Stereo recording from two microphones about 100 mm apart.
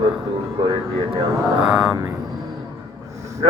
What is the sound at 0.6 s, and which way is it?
Mantra, 50° right (ahead or behind).